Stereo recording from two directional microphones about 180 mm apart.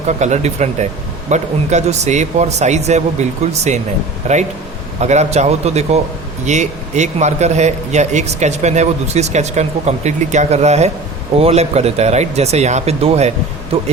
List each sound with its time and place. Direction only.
0.2 s a man's voice: 40° right (ahead or behind)